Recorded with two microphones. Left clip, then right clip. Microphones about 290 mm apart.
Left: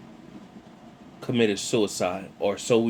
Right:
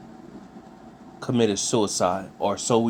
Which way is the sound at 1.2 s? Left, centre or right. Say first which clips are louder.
Right 1 dB; right.